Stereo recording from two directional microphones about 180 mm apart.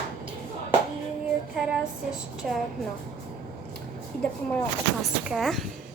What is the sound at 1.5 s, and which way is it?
A woman's voice, centre (ahead or behind).